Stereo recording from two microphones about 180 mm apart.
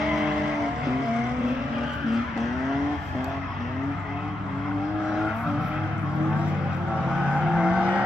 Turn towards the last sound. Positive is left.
turn(degrees=-5)  # may be behind; listen again after turning